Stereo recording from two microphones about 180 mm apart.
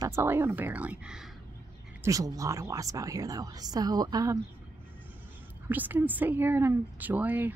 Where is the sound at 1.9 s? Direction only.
20° right (ahead or behind).